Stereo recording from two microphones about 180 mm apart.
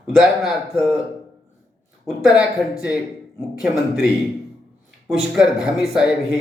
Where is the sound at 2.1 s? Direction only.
Centre (ahead or behind).